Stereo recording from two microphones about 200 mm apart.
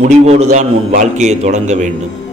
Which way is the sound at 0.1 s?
35° right (ahead or behind).